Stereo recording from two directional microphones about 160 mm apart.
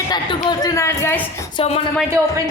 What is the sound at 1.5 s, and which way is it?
Speech, 35° left (ahead or behind).